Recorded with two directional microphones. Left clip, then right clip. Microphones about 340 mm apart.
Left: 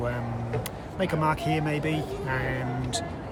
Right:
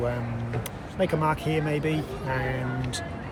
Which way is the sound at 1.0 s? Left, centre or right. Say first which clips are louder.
Right 1 dB; centre.